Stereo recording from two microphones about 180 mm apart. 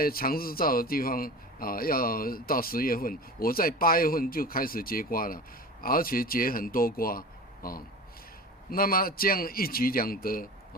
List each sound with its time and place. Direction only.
0.0 s a man's voice: 55° left (ahead or behind)